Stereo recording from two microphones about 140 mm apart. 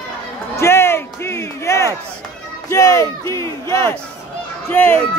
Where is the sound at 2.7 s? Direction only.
25° left (ahead or behind).